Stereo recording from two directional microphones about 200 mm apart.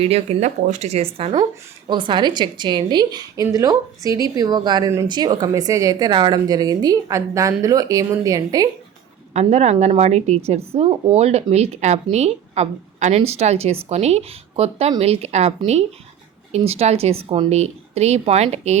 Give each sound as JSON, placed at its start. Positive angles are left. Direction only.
{"t": 0.0, "sound": "a woman's voice", "side_deg": -30}
{"t": 9.3, "sound": "a woman's voice", "side_deg": -35}